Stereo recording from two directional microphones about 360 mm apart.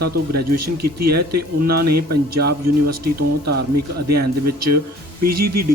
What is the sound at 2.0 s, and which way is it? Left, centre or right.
Speech, right.